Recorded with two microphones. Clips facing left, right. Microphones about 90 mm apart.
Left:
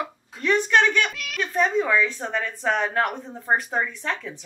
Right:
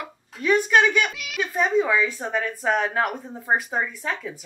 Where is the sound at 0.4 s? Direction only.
5° right (ahead or behind).